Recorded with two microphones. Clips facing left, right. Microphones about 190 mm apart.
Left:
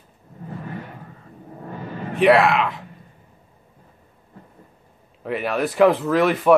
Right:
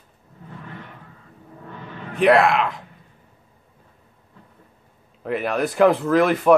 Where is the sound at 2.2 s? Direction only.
Centre (ahead or behind).